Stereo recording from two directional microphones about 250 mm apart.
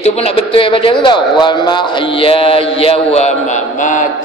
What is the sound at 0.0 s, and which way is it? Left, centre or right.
Speech, left.